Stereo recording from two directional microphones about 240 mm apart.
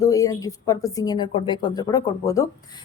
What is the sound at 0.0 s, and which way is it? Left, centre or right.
A woman's voice, centre.